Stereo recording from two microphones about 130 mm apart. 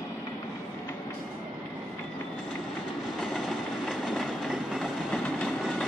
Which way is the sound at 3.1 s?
Centre (ahead or behind).